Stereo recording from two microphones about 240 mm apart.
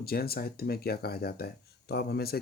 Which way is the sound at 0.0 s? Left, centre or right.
Left.